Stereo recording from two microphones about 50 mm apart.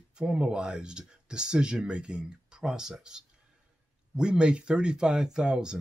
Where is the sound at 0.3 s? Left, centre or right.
Centre.